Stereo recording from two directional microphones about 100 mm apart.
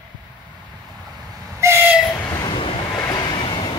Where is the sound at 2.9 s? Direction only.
35° left (ahead or behind).